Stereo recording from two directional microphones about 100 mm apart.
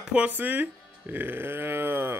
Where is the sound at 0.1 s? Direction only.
15° right (ahead or behind).